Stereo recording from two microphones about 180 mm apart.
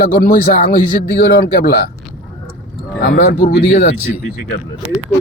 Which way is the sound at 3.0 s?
60° left (ahead or behind).